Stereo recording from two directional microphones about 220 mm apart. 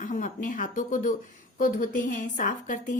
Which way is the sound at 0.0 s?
35° left (ahead or behind).